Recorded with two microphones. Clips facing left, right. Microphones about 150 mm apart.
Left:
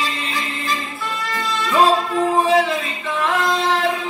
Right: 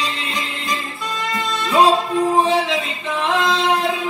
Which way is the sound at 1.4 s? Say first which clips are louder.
Right 1 dB; 20° right (ahead or behind).